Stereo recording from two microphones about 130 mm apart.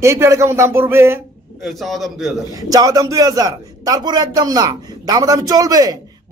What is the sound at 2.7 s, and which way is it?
A man's voice, 30° right (ahead or behind).